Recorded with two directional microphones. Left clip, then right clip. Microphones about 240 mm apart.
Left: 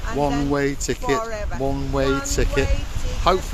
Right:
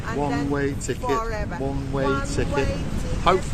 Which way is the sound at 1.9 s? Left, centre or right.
Left.